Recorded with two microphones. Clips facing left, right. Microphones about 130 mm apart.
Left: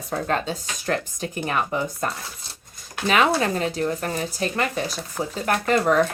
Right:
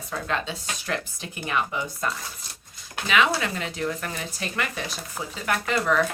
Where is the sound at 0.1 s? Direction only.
45° left (ahead or behind).